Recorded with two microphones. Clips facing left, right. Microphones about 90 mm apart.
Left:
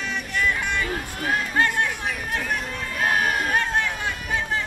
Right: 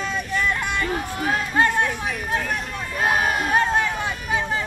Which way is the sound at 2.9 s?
15° right (ahead or behind).